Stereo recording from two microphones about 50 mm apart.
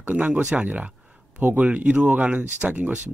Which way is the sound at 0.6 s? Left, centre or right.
Right.